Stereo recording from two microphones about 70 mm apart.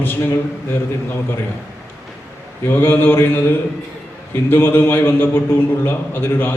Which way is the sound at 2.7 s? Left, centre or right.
Left.